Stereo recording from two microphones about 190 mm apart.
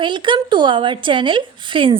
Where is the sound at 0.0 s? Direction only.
25° right (ahead or behind).